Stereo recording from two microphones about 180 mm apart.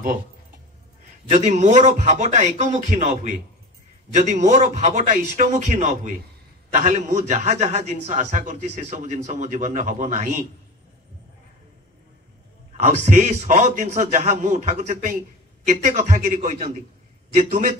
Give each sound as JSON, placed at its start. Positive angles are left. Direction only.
{"t": 1.3, "sound": "a man's voice", "side_deg": -40}
{"t": 12.7, "sound": "a man's voice", "side_deg": -40}